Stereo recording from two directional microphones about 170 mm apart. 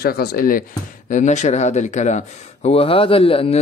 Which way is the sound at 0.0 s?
65° left (ahead or behind).